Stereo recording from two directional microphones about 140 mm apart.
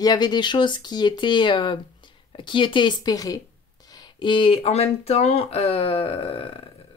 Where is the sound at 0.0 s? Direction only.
30° left (ahead or behind).